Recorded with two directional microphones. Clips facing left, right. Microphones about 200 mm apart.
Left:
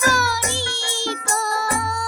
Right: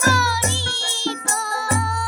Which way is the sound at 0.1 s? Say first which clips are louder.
Right 1 dB; 45° left (ahead or behind).